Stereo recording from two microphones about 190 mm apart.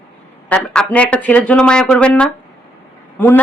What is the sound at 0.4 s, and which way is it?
A woman's voice, 5° left (ahead or behind).